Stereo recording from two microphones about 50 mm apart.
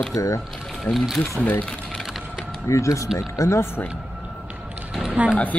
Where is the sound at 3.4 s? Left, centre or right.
Left.